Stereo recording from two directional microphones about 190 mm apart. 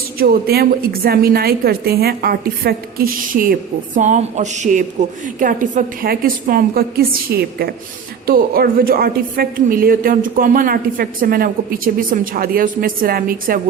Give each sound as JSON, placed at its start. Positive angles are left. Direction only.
{"t": 0.2, "sound": "a woman's voice", "side_deg": -55}